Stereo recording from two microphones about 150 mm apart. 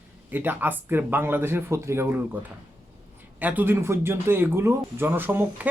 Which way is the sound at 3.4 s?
10° right (ahead or behind).